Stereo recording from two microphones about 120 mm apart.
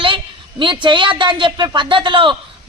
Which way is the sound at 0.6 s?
40° right (ahead or behind).